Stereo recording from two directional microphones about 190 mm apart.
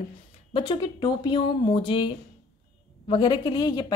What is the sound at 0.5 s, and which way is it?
A woman's voice, 25° left (ahead or behind).